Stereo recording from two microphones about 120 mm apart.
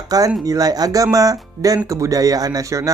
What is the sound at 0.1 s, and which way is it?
Speech, 30° right (ahead or behind).